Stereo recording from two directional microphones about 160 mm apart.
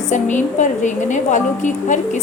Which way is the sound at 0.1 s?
50° left (ahead or behind).